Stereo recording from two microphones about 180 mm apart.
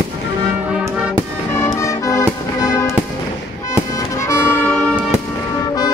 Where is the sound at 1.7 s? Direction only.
20° left (ahead or behind).